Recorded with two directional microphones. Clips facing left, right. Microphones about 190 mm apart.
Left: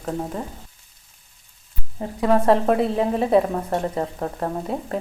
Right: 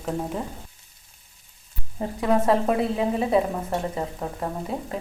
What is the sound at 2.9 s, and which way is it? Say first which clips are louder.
Speech: left 3 dB; 40° left (ahead or behind).